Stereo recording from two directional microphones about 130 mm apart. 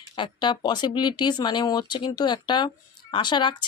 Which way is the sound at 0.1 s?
40° left (ahead or behind).